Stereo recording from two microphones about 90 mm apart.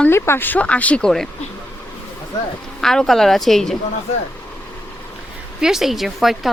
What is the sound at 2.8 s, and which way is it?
Speech, 5° left (ahead or behind).